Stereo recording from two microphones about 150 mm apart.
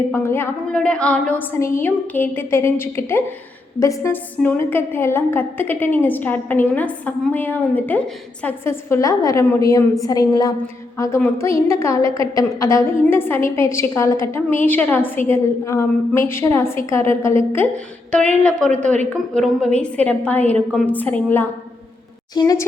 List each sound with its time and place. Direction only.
0.1 s a woman's voice: 15° left (ahead or behind)
22.4 s a woman's voice: 25° left (ahead or behind)